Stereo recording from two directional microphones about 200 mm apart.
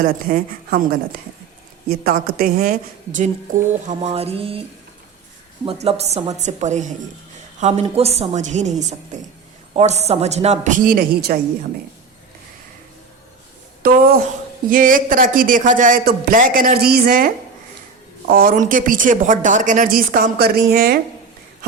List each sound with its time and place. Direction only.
0.0 s speech: 45° right (ahead or behind)
2.0 s a woman's voice: 45° right (ahead or behind); by 4.6 s 30° right (ahead or behind)
5.6 s a woman's voice: 30° right (ahead or behind); by 11.3 s 50° right (ahead or behind)
13.8 s speech: 50° right (ahead or behind)